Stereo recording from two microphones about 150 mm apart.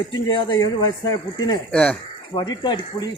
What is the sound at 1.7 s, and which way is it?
Speech, 5° left (ahead or behind).